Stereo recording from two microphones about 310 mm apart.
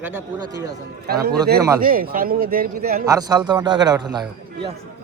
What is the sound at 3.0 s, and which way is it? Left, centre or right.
Speech, centre.